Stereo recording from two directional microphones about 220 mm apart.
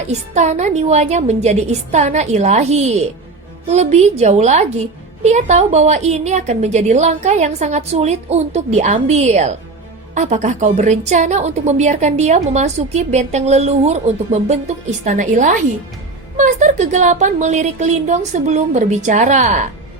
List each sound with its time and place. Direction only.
0.1 s a woman's voice: 30° right (ahead or behind)